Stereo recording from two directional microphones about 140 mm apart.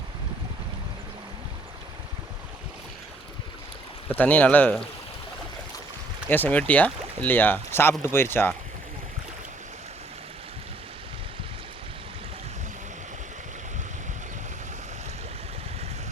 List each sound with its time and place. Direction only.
4.1 s speech: 10° left (ahead or behind)
6.2 s speech: 15° left (ahead or behind)